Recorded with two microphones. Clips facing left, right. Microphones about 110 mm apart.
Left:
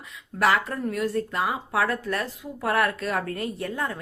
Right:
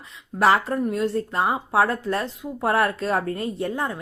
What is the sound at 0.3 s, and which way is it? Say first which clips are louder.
Speech: right 4 dB; 30° right (ahead or behind).